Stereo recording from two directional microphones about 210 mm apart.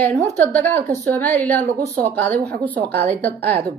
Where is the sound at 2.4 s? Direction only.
50° right (ahead or behind).